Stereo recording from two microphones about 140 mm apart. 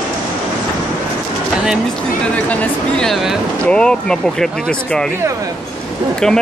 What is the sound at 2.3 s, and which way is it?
Speech, 10° left (ahead or behind).